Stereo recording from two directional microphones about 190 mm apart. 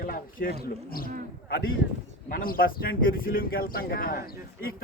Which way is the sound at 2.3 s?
50° left (ahead or behind).